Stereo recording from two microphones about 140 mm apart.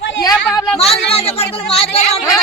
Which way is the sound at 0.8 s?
45° left (ahead or behind).